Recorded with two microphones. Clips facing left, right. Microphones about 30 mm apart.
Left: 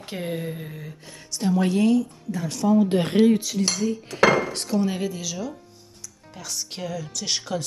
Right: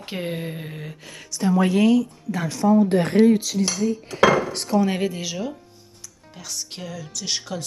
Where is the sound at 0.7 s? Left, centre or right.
Right.